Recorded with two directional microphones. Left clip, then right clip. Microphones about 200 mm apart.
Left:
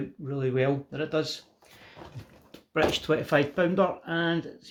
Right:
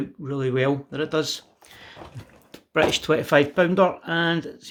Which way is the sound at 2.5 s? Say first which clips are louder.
Right 5 dB; 35° right (ahead or behind).